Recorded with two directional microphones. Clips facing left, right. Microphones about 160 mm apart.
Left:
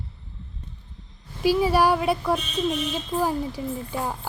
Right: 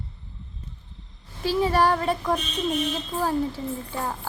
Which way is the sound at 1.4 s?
10° left (ahead or behind).